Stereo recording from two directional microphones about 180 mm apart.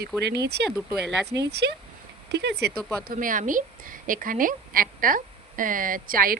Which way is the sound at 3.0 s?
50° right (ahead or behind).